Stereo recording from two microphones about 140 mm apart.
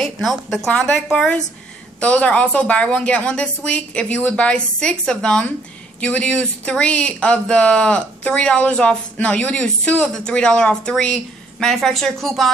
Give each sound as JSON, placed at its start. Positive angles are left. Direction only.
{"t": 0.0, "sound": "a woman's voice", "side_deg": 0}